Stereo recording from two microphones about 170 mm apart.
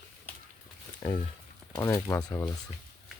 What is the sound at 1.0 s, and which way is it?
Speech, 20° left (ahead or behind).